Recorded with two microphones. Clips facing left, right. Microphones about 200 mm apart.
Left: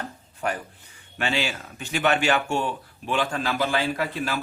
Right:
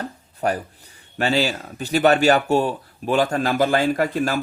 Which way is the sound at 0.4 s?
40° right (ahead or behind).